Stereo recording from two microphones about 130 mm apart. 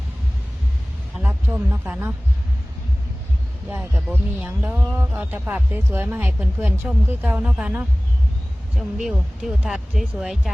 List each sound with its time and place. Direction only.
1.2 s speech: 15° right (ahead or behind)
3.7 s speech: 15° right (ahead or behind)